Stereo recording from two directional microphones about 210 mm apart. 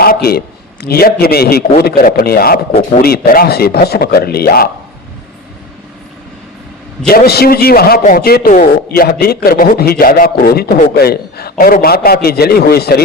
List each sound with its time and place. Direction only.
0.0 s a man's voice: 45° left (ahead or behind)
7.1 s a man's voice: 50° left (ahead or behind)